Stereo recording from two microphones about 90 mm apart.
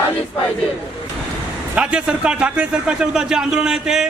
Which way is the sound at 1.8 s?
10° right (ahead or behind).